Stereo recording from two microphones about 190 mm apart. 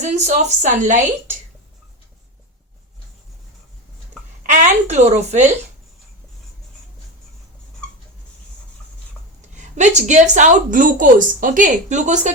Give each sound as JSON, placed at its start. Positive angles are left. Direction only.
{"t": 0.0, "sound": "a woman's voice", "side_deg": -40}
{"t": 4.4, "sound": "a woman's voice", "side_deg": -40}
{"t": 9.6, "sound": "a woman's voice", "side_deg": -40}